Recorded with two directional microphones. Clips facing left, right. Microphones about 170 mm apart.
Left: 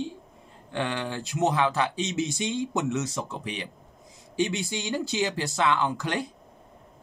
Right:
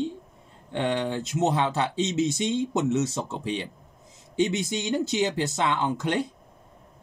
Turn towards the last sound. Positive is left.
turn(degrees=-20)  # may be behind; listen again after turning